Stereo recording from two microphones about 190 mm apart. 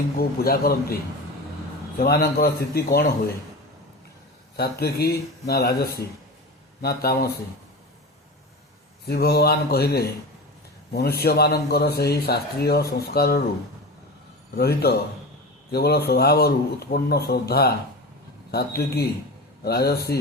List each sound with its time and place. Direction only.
0.2 s a man's voice: 50° left (ahead or behind)
2.0 s a man's voice: 55° left (ahead or behind)
4.5 s a man's voice: 55° left (ahead or behind)
9.0 s a man's voice: 60° left (ahead or behind)
14.5 s a man's voice: 55° left (ahead or behind)